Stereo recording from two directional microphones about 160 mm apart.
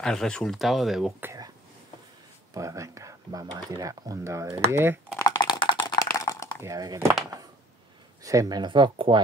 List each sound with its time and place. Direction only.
0.0 s speech: 5° left (ahead or behind)
1.2 s a sound: 20° right (ahead or behind)
2.5 s speech: 20° right (ahead or behind)
5.2 s computer keyboard: 25° left (ahead or behind)
5.9 s typing: 20° left (ahead or behind)
6.6 s speech: 20° right (ahead or behind)
8.2 s speech: 20° right (ahead or behind)